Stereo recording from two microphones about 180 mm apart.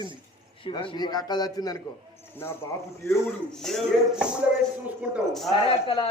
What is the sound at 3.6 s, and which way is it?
Speech, centre (ahead or behind).